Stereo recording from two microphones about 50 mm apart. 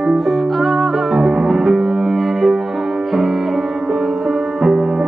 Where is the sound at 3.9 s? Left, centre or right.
Centre.